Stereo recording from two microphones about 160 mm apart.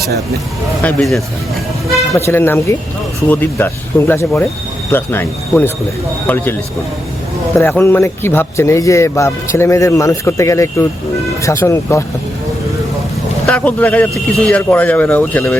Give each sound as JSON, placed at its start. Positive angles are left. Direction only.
{"t": 0.8, "sound": "speech", "side_deg": 5}
{"t": 2.1, "sound": "speech", "side_deg": 15}
{"t": 7.8, "sound": "speech", "side_deg": 15}
{"t": 13.5, "sound": "speech", "side_deg": 10}